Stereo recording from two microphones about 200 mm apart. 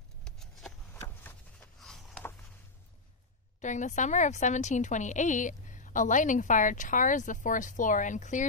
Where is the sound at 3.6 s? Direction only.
35° left (ahead or behind).